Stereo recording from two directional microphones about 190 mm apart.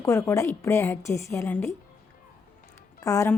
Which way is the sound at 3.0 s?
15° left (ahead or behind).